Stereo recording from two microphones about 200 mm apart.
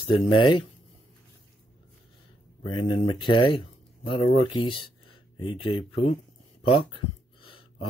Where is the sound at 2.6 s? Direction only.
25° left (ahead or behind).